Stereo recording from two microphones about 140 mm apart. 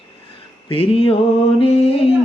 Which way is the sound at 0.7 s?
40° left (ahead or behind).